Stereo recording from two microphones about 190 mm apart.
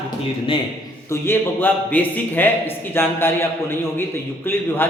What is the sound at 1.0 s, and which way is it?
A man's voice, 15° left (ahead or behind).